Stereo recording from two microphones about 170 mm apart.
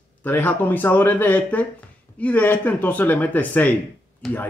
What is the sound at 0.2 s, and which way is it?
Speech, 10° left (ahead or behind).